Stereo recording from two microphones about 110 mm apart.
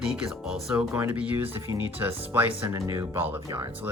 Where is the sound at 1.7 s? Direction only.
45° left (ahead or behind).